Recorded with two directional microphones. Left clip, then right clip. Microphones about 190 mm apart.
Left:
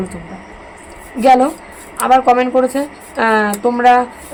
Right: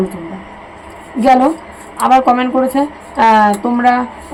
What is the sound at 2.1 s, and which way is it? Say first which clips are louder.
A woman's voice: left 1 dB; 15° left (ahead or behind).